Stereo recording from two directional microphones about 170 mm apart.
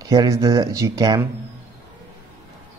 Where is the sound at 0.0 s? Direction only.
20° right (ahead or behind).